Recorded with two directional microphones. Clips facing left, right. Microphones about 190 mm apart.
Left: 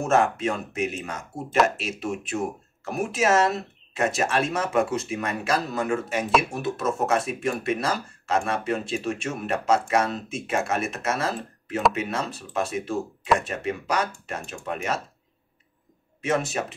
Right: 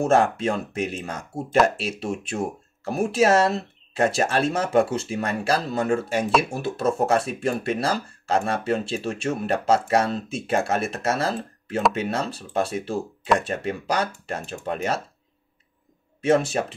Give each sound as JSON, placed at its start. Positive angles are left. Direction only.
{"t": 0.0, "sound": "speech", "side_deg": -35}
{"t": 16.2, "sound": "speech", "side_deg": -30}